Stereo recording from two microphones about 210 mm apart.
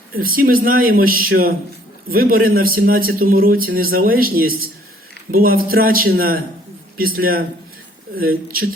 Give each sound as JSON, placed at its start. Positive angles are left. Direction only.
{"t": 0.1, "sound": "a man's voice", "side_deg": -45}